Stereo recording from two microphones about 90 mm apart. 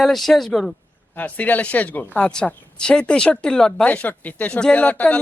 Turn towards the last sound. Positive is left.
turn(degrees=15)  # may be behind; listen again after turning